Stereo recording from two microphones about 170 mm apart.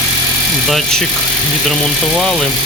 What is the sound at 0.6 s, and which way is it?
Speech, centre (ahead or behind).